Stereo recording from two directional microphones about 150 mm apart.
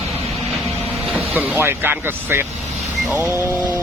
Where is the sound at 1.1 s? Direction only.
10° right (ahead or behind).